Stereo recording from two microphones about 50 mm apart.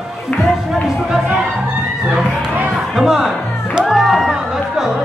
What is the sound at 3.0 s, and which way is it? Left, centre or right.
Music, centre.